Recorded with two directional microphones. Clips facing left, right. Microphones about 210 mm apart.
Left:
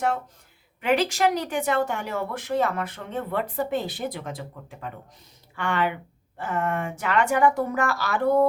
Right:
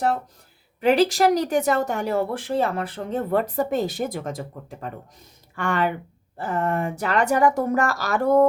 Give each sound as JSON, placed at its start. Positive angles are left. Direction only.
{"t": 0.8, "sound": "speech", "side_deg": -35}